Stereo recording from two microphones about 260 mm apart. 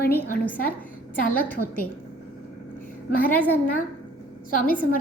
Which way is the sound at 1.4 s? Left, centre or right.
Centre.